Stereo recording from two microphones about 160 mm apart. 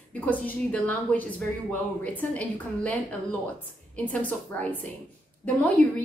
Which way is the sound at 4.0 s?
10° left (ahead or behind).